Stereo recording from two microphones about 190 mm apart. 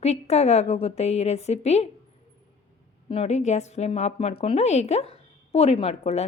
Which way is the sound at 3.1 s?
35° left (ahead or behind).